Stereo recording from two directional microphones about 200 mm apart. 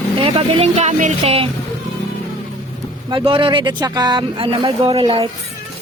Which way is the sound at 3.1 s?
25° right (ahead or behind).